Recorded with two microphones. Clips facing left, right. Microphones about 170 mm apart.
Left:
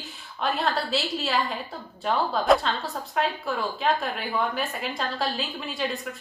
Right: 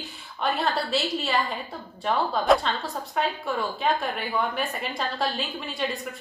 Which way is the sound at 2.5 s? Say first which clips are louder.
Even; centre (ahead or behind).